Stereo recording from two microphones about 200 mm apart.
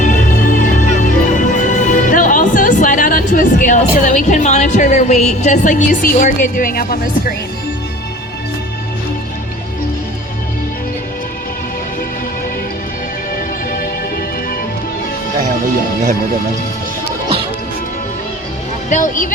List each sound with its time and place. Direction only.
0.0 s music: 40° left (ahead or behind)
18.9 s speech: 40° left (ahead or behind)